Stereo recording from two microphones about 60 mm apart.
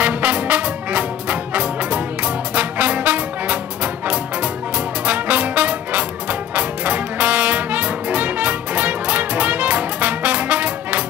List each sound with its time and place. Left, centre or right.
0.0 s music: right